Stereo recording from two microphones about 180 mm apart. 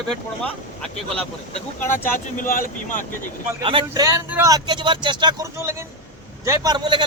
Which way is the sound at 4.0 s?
15° right (ahead or behind).